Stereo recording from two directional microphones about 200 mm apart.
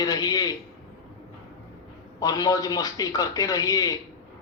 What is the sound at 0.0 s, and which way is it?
Speech, 20° left (ahead or behind).